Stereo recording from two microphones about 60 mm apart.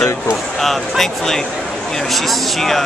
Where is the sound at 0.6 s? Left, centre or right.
Centre.